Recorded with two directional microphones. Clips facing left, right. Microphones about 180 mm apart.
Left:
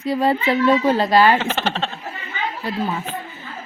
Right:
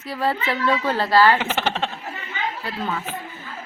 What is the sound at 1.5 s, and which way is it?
Speech, 15° right (ahead or behind).